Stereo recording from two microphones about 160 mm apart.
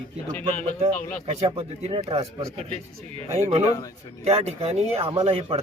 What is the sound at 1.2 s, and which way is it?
Speech, 35° right (ahead or behind).